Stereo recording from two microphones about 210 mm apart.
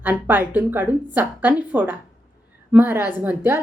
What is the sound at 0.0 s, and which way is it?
Speech, 10° right (ahead or behind).